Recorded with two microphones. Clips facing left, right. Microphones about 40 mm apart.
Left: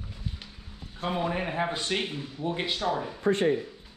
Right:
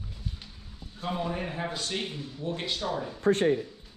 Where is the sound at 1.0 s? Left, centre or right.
Left.